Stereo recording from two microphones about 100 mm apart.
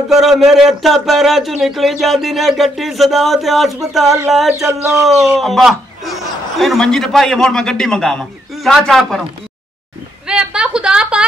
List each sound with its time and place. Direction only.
0.1 s speech: 5° right (ahead or behind)
10.2 s a woman's voice: 10° right (ahead or behind)